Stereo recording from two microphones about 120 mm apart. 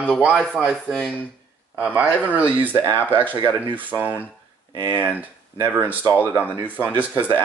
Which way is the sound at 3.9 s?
15° right (ahead or behind).